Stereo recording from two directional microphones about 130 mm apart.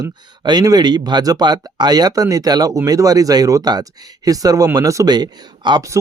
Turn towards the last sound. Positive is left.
turn(degrees=-30)  # may be behind; listen again after turning